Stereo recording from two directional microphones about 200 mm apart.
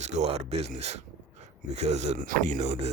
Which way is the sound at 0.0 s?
35° right (ahead or behind).